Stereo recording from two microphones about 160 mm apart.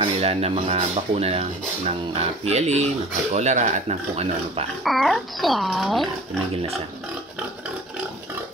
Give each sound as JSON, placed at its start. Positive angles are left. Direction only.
{"t": 0.0, "sound": "speech", "side_deg": -40}
{"t": 4.8, "sound": "a child's voice", "side_deg": 0}